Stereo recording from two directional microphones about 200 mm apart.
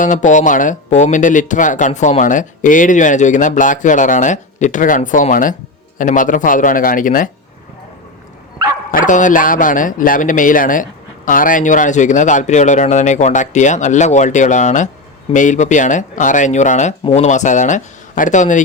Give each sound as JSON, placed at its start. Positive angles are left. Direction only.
{"t": 0.0, "sound": "speech", "side_deg": 40}
{"t": 8.9, "sound": "speech", "side_deg": 40}